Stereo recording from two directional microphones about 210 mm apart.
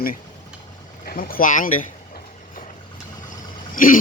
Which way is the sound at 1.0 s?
45° left (ahead or behind).